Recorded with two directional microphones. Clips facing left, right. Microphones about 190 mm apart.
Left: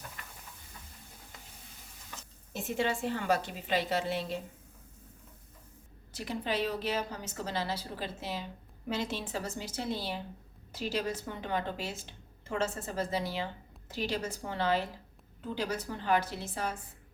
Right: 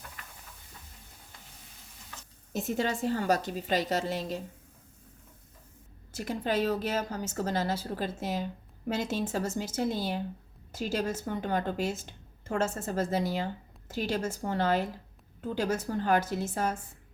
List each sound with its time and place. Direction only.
2.5 s a woman's voice: 40° right (ahead or behind)
6.1 s a woman's voice: 45° right (ahead or behind)